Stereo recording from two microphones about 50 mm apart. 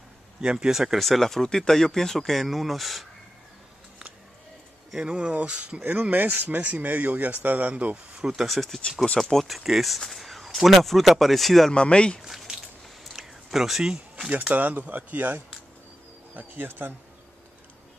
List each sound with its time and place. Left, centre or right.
0.4 s speech: centre
0.9 s speech: centre
5.0 s speech: right
5.8 s a man's voice: right
8.4 s speech: centre
11.7 s speech: centre
12.3 s a sound: centre
14.5 s a man's voice: right
16.3 s speech: right